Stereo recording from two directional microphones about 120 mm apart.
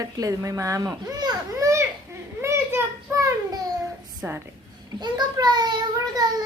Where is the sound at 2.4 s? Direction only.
25° right (ahead or behind).